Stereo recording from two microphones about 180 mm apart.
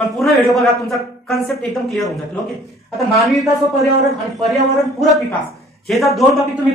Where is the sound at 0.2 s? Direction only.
Centre (ahead or behind).